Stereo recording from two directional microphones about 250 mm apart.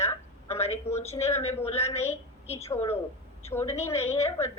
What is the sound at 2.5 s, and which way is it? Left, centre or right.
A woman's voice, centre.